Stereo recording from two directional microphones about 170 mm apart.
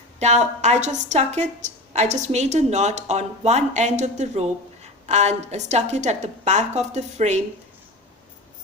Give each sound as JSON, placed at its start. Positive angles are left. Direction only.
{"t": 0.2, "sound": "a woman's voice", "side_deg": -40}